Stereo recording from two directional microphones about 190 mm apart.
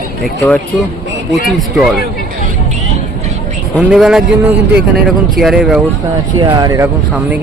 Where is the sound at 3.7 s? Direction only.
Centre (ahead or behind).